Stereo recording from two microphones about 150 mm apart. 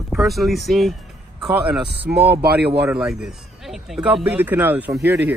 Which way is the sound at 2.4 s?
90° right.